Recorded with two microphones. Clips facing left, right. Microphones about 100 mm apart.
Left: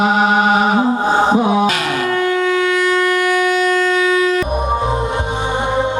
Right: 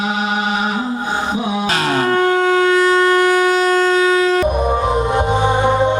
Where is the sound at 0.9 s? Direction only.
40° left (ahead or behind); by 1.6 s 60° left (ahead or behind).